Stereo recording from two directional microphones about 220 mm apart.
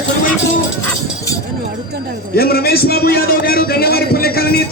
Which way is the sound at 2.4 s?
45° left (ahead or behind).